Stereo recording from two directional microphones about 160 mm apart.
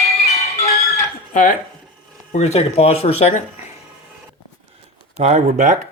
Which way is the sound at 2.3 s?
45° left (ahead or behind).